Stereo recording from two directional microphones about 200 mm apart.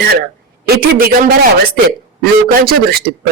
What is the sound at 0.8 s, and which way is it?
A man's voice, 45° right (ahead or behind).